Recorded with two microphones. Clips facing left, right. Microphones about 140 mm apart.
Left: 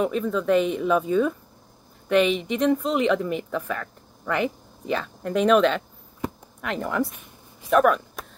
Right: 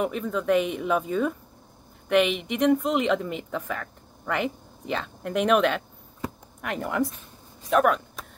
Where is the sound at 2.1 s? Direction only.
15° right (ahead or behind).